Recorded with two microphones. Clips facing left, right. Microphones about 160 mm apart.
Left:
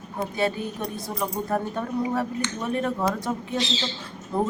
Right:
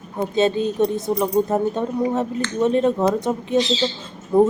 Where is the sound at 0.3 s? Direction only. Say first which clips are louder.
Right 10 dB; 20° right (ahead or behind).